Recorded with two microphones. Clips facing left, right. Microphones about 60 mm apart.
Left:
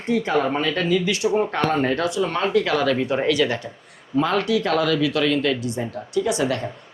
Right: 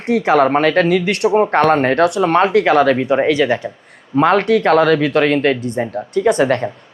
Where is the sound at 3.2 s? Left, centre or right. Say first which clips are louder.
Right 4 dB; right.